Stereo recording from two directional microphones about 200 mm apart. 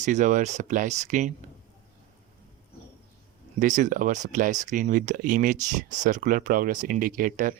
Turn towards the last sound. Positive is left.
turn(degrees=-45)  # may be behind; listen again after turning